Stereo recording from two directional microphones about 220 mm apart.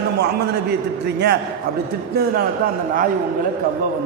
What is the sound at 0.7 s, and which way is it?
Speech, 50° right (ahead or behind).